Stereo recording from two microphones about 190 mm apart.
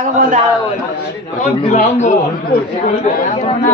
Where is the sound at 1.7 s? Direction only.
40° left (ahead or behind).